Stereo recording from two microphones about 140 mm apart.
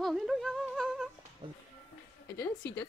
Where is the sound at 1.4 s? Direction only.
35° right (ahead or behind).